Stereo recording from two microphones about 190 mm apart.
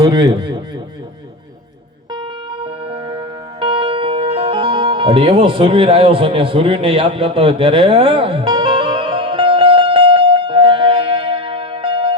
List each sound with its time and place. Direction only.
0.0 s a man's voice: 20° right (ahead or behind)
2.6 s music: 30° right (ahead or behind)